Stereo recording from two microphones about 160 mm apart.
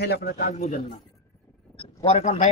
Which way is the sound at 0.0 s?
90° left.